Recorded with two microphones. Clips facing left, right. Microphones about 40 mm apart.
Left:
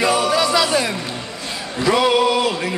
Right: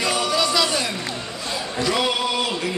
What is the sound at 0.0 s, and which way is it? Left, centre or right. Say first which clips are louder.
Music: left 5 dB; centre.